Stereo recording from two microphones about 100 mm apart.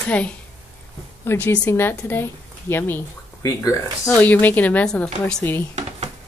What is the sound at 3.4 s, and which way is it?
Speech, 35° left (ahead or behind).